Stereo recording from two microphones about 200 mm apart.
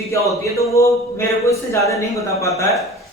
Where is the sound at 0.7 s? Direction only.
15° left (ahead or behind).